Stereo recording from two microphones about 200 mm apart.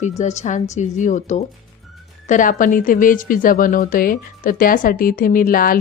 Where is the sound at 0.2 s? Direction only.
35° left (ahead or behind).